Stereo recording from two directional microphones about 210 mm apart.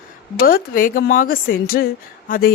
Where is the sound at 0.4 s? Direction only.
45° left (ahead or behind).